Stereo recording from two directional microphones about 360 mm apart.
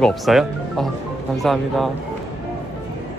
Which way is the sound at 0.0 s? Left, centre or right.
Centre.